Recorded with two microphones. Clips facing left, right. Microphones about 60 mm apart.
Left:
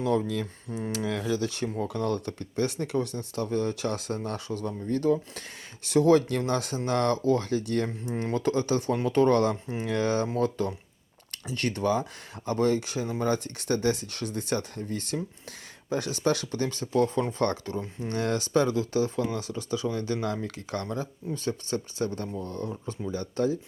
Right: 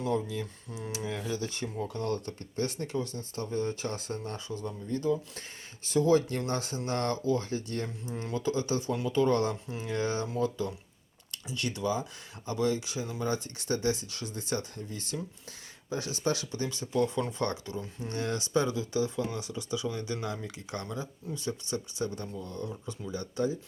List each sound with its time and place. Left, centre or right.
0.0 s speech: left
1.0 s speech: left
1.8 s speech: left
5.8 s speech: left
7.9 s speech: left
10.3 s speech: left
18.1 s speech: left
20.2 s speech: left
22.4 s speech: left